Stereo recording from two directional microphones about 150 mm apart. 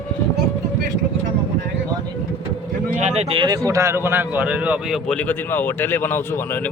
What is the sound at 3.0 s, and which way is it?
Speech, 45° right (ahead or behind).